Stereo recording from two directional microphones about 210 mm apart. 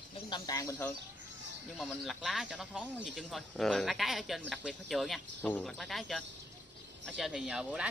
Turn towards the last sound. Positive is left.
turn(degrees=-5)  # may be behind; listen again after turning